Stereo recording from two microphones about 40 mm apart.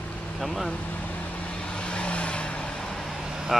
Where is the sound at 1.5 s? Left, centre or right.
Left.